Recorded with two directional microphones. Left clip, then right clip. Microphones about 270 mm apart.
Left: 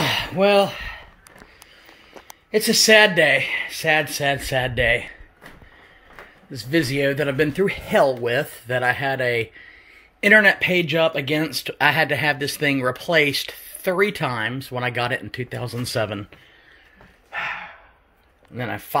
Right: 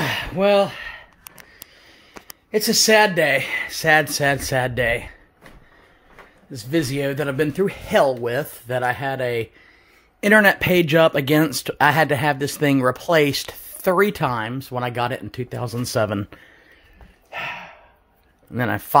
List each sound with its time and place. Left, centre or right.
0.0 s a sound: centre
2.5 s speech: centre
3.3 s speech: centre
6.6 s speech: centre
10.2 s speech: centre
14.3 s speech: centre
18.5 s speech: right